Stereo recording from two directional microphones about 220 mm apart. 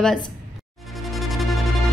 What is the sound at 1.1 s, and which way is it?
Music, centre (ahead or behind).